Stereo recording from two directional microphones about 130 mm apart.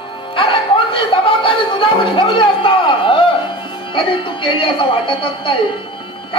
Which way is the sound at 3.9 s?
40° left (ahead or behind).